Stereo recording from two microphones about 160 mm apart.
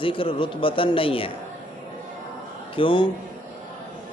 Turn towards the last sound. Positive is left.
turn(degrees=30)  # may be behind; listen again after turning